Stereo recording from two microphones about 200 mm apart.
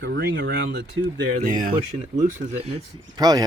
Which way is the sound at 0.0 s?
50° right (ahead or behind).